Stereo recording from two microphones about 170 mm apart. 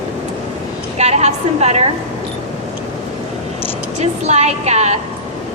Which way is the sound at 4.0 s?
40° right (ahead or behind).